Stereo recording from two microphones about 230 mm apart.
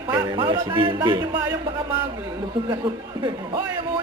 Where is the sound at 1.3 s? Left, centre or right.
Centre.